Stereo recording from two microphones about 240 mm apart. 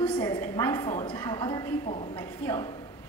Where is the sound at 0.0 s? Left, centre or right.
Centre.